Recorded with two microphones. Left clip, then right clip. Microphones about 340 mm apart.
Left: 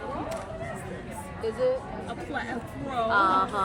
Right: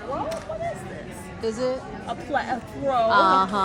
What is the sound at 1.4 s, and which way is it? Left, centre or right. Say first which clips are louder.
Speech: right 1 dB; right.